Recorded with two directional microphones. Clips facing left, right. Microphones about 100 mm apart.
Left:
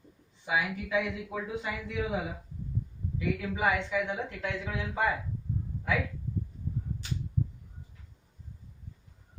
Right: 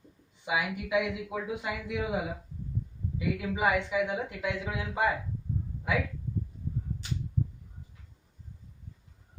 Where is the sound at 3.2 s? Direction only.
15° right (ahead or behind).